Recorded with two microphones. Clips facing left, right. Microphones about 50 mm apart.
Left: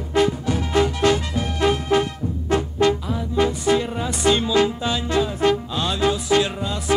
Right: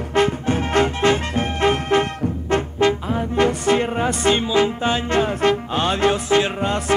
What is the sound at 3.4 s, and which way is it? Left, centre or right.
Music, right.